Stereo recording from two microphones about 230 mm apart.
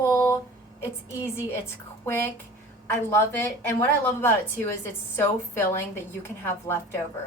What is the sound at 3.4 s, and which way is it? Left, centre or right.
A woman's voice, centre.